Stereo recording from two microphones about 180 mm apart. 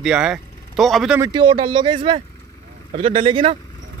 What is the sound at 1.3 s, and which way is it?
Speech, 30° right (ahead or behind).